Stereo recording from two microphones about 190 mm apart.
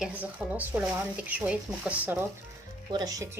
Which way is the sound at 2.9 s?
20° right (ahead or behind).